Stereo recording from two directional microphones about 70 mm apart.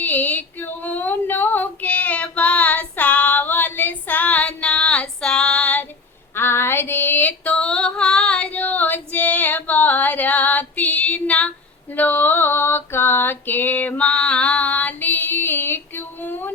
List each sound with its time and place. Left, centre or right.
0.0 s female singing: left
6.3 s female singing: left